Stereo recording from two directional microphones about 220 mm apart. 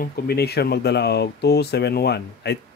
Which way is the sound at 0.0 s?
45° left (ahead or behind).